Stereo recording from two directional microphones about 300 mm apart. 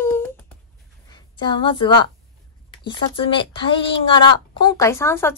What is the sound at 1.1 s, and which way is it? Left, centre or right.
A woman's voice, centre.